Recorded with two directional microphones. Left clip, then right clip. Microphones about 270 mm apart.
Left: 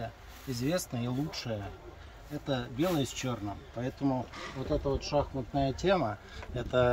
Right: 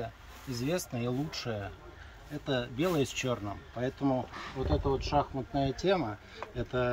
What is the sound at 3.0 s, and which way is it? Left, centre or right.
Speech, centre.